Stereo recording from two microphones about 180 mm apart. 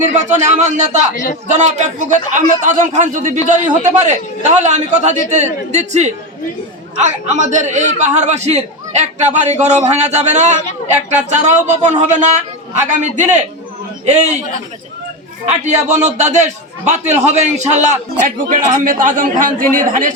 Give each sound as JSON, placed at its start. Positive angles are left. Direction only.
{"t": 0.0, "sound": "a man's voice", "side_deg": -40}
{"t": 1.1, "sound": "speech", "side_deg": 45}
{"t": 1.5, "sound": "a man's voice", "side_deg": -40}
{"t": 15.6, "sound": "a man's voice", "side_deg": -40}